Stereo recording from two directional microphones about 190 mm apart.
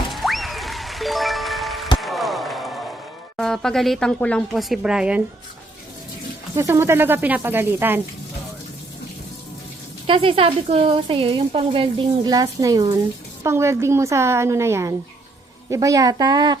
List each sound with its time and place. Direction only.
0.1 s music: centre (ahead or behind)
2.0 s slam: centre (ahead or behind)
3.3 s speech: centre (ahead or behind)
6.6 s a woman's voice: 15° right (ahead or behind)
10.1 s a woman's voice: 30° right (ahead or behind)